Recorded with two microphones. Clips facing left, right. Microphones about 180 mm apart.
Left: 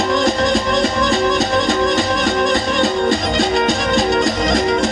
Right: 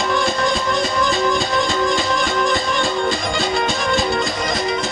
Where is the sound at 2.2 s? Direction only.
60° left (ahead or behind).